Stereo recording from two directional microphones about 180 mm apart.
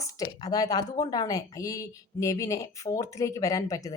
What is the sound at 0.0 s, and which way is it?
A woman's voice, 20° left (ahead or behind).